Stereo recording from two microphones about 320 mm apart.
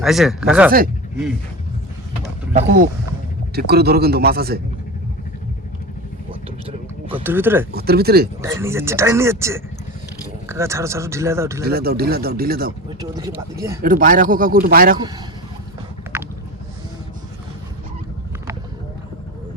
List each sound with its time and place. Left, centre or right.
0.0 s speech: centre
2.5 s speech: right
6.7 s speech: centre
7.7 s speech: right
8.4 s speech: centre
11.6 s speech: right
13.0 s speech: centre
13.8 s speech: right